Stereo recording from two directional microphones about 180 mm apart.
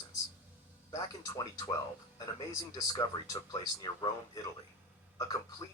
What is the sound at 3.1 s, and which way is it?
Speech, 30° left (ahead or behind).